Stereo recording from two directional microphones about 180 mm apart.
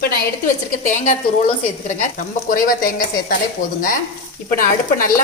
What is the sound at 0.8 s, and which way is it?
Speech, 45° left (ahead or behind).